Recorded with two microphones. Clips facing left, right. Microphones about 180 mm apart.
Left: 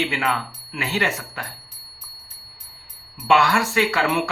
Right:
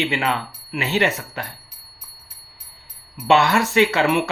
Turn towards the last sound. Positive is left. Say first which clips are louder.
# right 4 dB
turn(degrees=-20)  # may be behind; listen again after turning